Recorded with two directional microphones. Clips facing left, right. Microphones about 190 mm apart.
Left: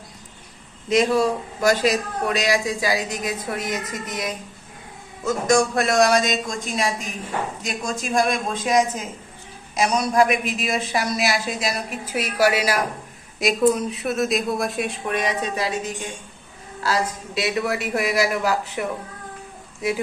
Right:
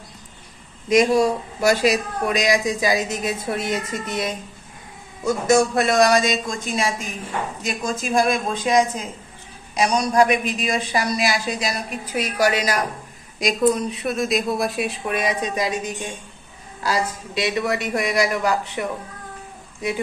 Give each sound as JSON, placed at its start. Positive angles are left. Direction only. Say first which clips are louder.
{"t": 0.9, "sound": "a man's voice", "louder": "right 2 dB", "side_deg": -10}
{"t": 5.2, "sound": "a man's voice", "louder": "right 2 dB", "side_deg": -5}
{"t": 17.3, "sound": "a man's voice", "louder": "right 1 dB", "side_deg": 0}